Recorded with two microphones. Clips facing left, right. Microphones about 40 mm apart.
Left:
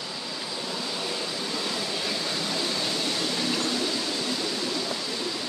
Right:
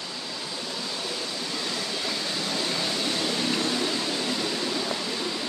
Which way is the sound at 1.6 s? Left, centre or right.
Centre.